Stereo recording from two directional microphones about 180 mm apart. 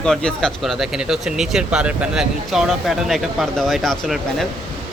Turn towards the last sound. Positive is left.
turn(degrees=0)  # may be behind; listen again after turning